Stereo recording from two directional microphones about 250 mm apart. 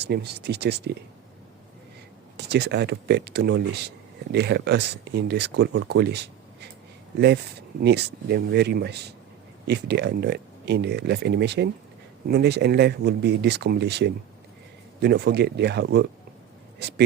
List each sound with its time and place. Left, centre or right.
0.0 s speech: right
2.5 s speech: right
7.8 s speech: right